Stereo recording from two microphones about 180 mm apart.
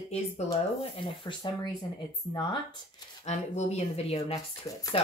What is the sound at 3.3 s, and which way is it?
Speech, 40° left (ahead or behind).